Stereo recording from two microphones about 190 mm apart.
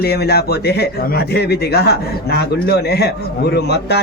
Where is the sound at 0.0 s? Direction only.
55° left (ahead or behind).